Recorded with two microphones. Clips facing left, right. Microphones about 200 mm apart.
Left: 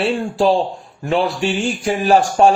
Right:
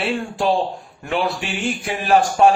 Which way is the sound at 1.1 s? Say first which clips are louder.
Left 5 dB; 35° left (ahead or behind).